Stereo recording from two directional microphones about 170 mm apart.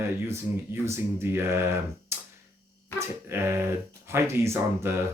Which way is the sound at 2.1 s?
15° right (ahead or behind).